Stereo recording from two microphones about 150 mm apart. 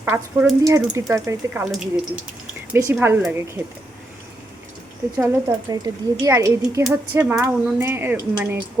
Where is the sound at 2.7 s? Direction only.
15° right (ahead or behind).